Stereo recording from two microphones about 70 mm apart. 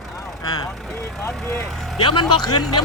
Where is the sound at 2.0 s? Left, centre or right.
Left.